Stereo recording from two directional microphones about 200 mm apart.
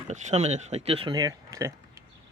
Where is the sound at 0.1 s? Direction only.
35° right (ahead or behind).